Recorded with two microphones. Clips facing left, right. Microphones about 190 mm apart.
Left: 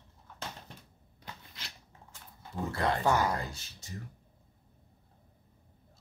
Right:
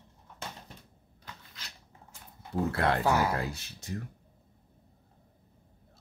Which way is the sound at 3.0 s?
5° right (ahead or behind).